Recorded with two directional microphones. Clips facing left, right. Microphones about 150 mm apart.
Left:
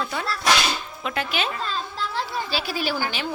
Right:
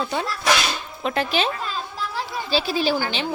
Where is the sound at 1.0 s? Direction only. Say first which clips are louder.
Right 5 dB; 35° right (ahead or behind).